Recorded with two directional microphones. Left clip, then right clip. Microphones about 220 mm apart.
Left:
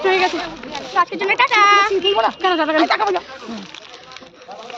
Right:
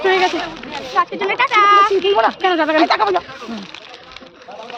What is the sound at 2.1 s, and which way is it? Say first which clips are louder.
Speech: right 3 dB; 35° right (ahead or behind).